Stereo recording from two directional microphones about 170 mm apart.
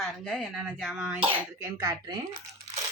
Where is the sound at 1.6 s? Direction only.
20° right (ahead or behind).